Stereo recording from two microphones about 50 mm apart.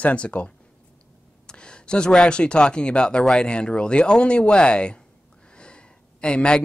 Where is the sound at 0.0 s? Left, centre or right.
Left.